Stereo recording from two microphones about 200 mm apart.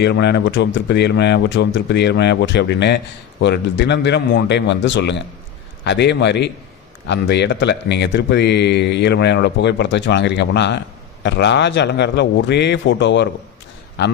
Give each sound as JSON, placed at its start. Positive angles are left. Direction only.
{"t": 0.0, "sound": "speech", "side_deg": 60}